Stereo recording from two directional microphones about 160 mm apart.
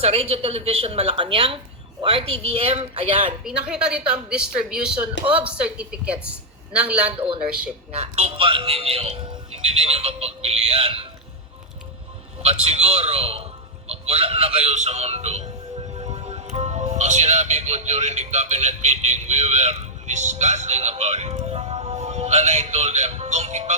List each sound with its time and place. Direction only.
0.0 s a man's voice: 40° right (ahead or behind)
3.4 s a woman's voice: 5° right (ahead or behind)
7.9 s a man's voice: 40° right (ahead or behind)
12.6 s a man's voice: 40° right (ahead or behind)